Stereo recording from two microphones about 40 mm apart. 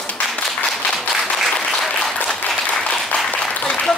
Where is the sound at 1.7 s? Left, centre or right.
Centre.